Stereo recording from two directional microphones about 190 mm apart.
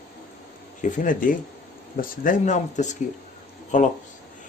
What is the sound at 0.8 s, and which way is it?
Speech, 45° left (ahead or behind).